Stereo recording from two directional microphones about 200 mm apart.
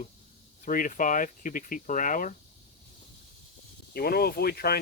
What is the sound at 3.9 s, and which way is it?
Speech, 50° left (ahead or behind).